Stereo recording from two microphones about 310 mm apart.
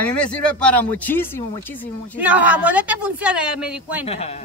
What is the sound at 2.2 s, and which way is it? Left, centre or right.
Speech, centre.